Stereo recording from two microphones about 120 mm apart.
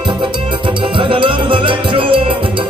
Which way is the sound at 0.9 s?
45° right (ahead or behind).